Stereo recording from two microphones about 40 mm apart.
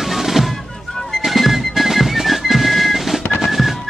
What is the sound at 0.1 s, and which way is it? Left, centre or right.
Music, centre.